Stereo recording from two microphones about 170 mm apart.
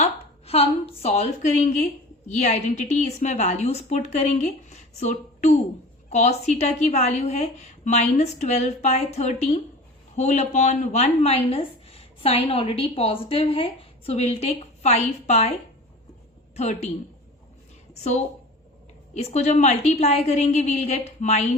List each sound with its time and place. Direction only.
0.0 s a woman's voice: 35° left (ahead or behind)
16.6 s speech: 40° left (ahead or behind)
17.9 s a woman's voice: 40° left (ahead or behind)